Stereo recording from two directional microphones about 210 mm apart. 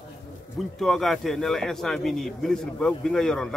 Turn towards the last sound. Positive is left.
turn(degrees=5)  # may be behind; listen again after turning